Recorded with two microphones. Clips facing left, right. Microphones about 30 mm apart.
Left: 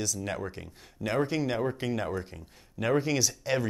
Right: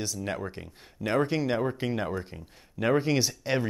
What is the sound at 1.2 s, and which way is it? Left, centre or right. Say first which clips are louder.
Speech: right 1 dB; right.